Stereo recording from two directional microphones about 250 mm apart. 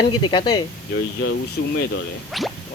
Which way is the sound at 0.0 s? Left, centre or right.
Centre.